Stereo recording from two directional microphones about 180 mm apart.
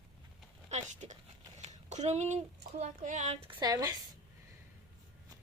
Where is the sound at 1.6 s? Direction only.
40° right (ahead or behind).